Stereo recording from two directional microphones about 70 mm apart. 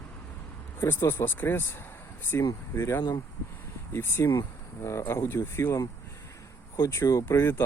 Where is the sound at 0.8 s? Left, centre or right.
Left.